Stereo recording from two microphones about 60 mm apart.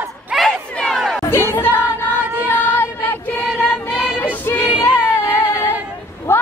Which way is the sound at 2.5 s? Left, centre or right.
Left.